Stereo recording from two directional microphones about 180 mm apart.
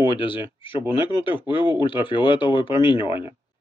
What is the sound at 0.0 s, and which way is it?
Speech, 30° left (ahead or behind).